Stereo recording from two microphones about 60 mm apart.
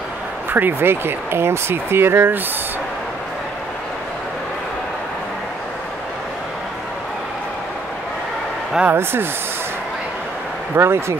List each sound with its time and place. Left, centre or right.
0.5 s speech: right
8.8 s speech: right
10.8 s speech: right